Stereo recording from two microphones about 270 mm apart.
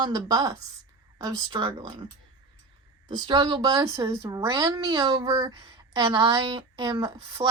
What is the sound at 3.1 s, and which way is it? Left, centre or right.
Speech, centre.